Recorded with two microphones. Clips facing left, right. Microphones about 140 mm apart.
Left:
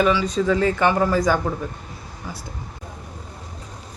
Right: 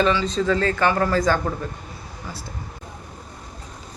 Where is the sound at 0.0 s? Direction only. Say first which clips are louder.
Left 1 dB; 10° left (ahead or behind).